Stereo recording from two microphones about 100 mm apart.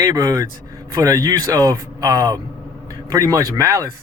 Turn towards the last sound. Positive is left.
turn(degrees=-35)  # may be behind; listen again after turning